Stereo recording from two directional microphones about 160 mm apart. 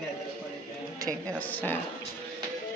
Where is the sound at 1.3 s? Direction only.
10° left (ahead or behind).